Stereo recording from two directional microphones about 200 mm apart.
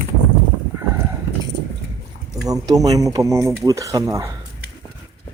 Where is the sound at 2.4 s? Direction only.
15° right (ahead or behind).